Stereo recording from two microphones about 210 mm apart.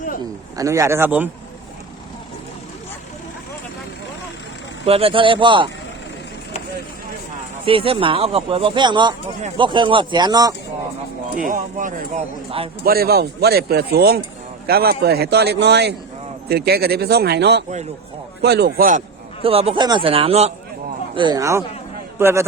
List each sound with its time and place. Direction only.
0.5 s speech: 15° right (ahead or behind)
4.9 s speech: 25° right (ahead or behind)
7.6 s speech: 25° right (ahead or behind)
11.4 s speech: 40° right (ahead or behind)
12.8 s speech: 45° right (ahead or behind)
19.4 s speech: 25° right (ahead or behind); by 22.4 s 10° right (ahead or behind)